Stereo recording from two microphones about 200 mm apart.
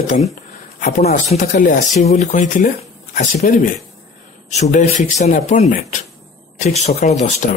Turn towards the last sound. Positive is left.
turn(degrees=35)  # may be behind; listen again after turning